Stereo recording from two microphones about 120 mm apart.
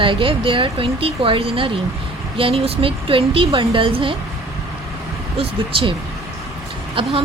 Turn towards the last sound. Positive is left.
turn(degrees=-45)  # may be behind; listen again after turning